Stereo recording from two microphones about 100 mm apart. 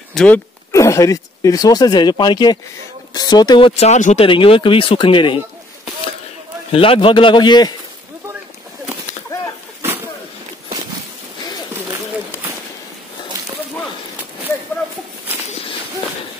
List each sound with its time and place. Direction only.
0.1 s speech: 10° left (ahead or behind)
0.7 s speech: 30° left (ahead or behind)
3.6 s speech: 90° left; by 5.4 s 60° left (ahead or behind)
6.7 s speech: 65° left (ahead or behind); by 7.7 s 45° left (ahead or behind)